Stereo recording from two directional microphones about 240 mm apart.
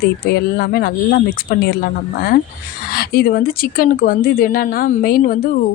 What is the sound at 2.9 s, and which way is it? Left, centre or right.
Speech, left.